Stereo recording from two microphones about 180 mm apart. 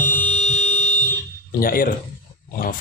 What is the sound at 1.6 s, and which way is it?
Speech, 55° left (ahead or behind).